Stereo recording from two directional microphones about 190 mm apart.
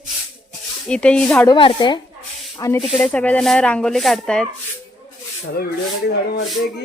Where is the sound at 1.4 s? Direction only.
25° left (ahead or behind).